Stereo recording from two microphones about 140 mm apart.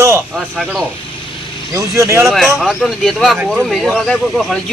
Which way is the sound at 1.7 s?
20° right (ahead or behind).